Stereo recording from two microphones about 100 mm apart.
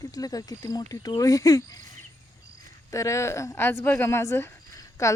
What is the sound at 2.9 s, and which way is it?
A woman's voice, 30° left (ahead or behind).